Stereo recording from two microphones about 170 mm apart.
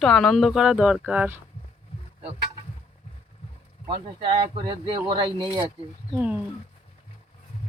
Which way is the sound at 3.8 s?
30° right (ahead or behind).